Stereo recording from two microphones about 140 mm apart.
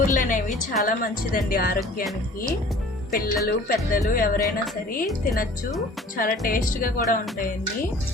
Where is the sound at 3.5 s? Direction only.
90° left.